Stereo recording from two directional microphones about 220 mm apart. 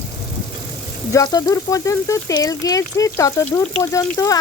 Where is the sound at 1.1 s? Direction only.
15° left (ahead or behind).